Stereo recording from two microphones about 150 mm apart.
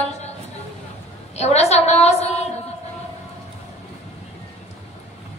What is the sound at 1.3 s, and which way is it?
A woman's voice, 45° left (ahead or behind).